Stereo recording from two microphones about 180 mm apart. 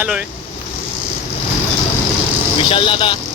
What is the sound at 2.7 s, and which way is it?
Speech, 30° left (ahead or behind).